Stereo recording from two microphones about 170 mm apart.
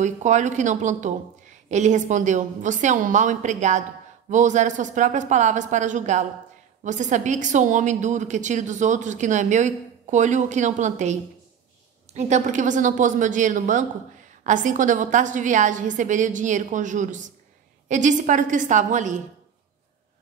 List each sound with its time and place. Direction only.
0.0 s a woman's voice: 45° right (ahead or behind)